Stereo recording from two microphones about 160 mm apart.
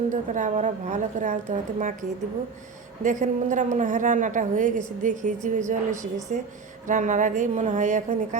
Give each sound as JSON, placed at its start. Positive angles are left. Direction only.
{"t": 0.1, "sound": "a woman's voice", "side_deg": -50}
{"t": 3.0, "sound": "a woman's voice", "side_deg": -50}